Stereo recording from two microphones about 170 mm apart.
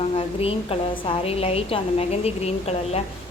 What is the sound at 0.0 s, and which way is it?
A woman's voice, 35° left (ahead or behind).